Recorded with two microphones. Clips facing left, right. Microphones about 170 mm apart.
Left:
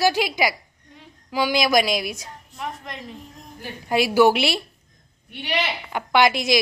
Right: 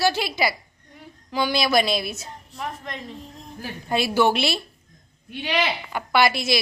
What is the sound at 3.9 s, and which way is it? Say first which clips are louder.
Speech: left 4 dB; 10° left (ahead or behind).